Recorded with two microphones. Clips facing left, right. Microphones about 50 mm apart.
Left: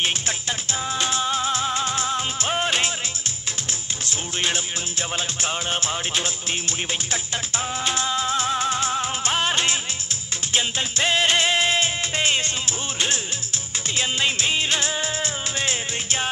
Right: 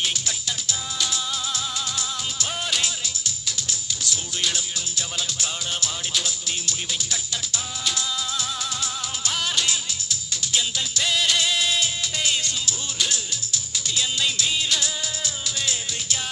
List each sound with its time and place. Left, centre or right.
0.0 s music: left
4.0 s music: left